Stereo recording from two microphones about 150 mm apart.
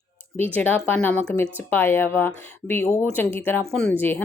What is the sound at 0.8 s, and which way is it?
Speech, 15° left (ahead or behind).